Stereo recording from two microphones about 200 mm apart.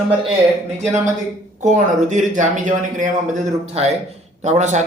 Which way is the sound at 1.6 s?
40° right (ahead or behind).